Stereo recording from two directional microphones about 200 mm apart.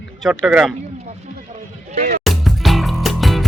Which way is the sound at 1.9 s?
40° right (ahead or behind).